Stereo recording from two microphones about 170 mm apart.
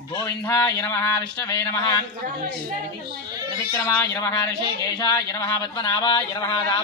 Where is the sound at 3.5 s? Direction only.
20° left (ahead or behind).